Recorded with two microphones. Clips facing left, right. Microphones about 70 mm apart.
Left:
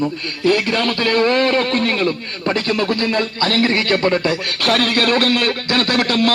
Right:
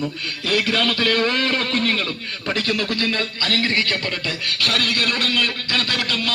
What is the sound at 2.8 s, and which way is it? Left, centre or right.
Speech, left.